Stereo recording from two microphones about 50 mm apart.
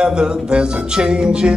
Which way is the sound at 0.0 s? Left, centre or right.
Centre.